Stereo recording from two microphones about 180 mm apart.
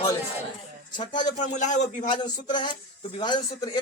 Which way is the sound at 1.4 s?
45° left (ahead or behind).